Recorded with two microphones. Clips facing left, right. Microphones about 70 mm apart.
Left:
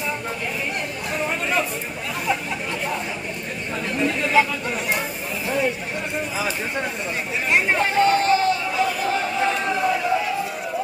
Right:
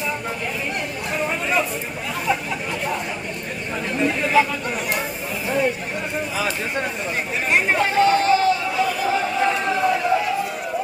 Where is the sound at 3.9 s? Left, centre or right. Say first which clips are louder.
Right 1 dB; centre.